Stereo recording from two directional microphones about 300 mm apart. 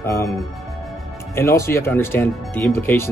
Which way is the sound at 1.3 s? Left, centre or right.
Centre.